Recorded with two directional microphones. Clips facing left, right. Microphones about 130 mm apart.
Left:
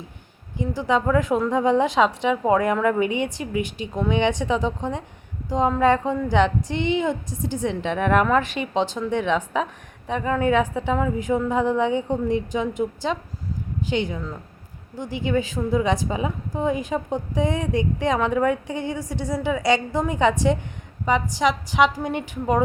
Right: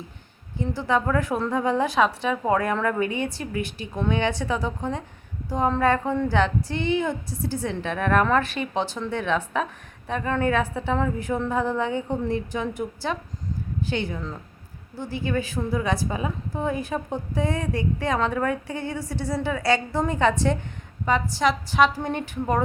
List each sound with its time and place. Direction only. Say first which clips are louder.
0.5 s a woman's voice: left 2 dB; 15° left (ahead or behind)